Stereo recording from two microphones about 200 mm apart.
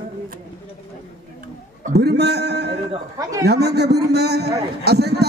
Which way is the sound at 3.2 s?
15° right (ahead or behind).